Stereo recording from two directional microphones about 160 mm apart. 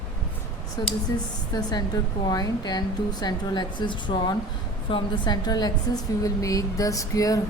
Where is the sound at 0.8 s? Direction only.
25° left (ahead or behind).